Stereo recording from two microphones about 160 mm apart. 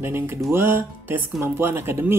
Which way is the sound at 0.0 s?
15° right (ahead or behind).